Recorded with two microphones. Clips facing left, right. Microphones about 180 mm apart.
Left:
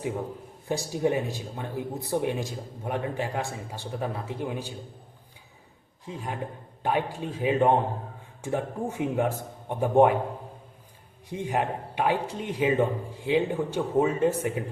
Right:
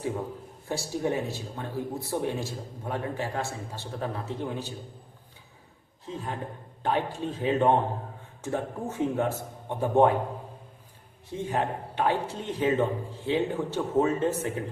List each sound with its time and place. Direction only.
0.7 s speech: 15° left (ahead or behind)
6.1 s speech: 10° left (ahead or behind)
11.3 s speech: 15° left (ahead or behind)